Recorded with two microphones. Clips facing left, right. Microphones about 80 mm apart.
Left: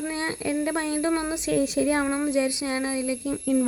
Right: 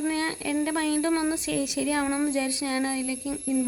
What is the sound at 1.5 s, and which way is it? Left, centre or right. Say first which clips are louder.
Speech: left 4 dB; left.